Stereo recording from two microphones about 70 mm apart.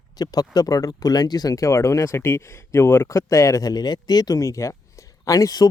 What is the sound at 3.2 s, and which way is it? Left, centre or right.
Speech, left.